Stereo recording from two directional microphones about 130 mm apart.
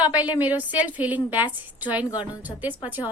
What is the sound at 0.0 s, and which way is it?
A woman's voice, 10° right (ahead or behind).